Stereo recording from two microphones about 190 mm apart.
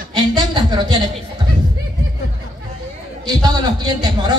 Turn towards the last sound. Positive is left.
turn(degrees=-20)  # may be behind; listen again after turning